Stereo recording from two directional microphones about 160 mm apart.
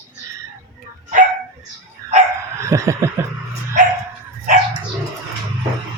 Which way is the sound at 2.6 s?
20° right (ahead or behind).